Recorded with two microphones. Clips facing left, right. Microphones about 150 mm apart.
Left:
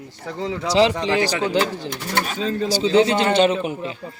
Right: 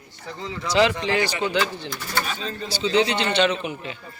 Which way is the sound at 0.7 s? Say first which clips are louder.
Left 2 dB; 30° left (ahead or behind).